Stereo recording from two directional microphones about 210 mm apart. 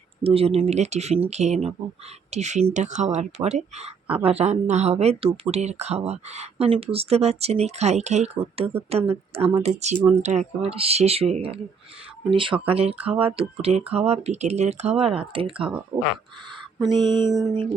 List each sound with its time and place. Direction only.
0.2 s speech: 30° right (ahead or behind)